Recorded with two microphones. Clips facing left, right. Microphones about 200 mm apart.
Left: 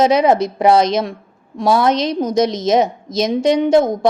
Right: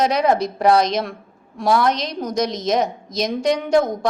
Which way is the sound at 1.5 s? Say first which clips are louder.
Left 3 dB; 25° left (ahead or behind).